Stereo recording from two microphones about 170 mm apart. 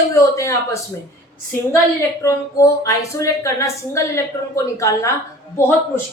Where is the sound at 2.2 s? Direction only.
20° left (ahead or behind).